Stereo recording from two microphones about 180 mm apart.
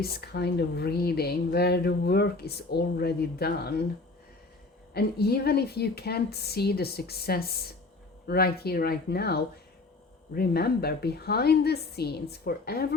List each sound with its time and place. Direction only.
0.0 s speech: 60° left (ahead or behind)
4.9 s speech: 60° left (ahead or behind)